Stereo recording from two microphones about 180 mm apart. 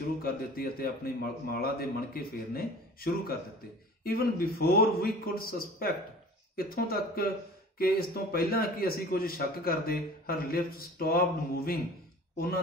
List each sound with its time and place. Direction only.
0.2 s a man's voice: 55° left (ahead or behind)